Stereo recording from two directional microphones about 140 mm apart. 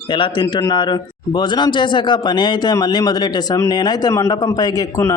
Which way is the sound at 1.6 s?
35° left (ahead or behind).